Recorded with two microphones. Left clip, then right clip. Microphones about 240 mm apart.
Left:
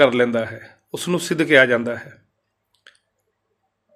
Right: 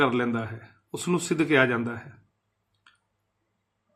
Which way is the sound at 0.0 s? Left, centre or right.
Centre.